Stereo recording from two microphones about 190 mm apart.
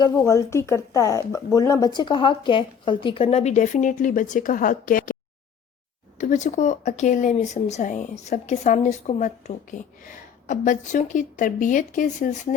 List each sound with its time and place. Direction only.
0.0 s speech: 15° left (ahead or behind); by 5.1 s 45° left (ahead or behind)
6.1 s speech: 40° left (ahead or behind)